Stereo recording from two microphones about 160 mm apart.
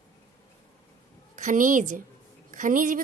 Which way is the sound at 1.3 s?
55° right (ahead or behind).